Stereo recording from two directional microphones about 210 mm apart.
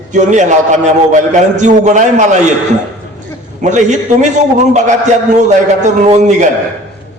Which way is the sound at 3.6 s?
35° right (ahead or behind).